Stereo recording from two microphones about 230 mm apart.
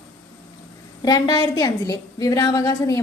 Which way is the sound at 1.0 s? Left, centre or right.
Centre.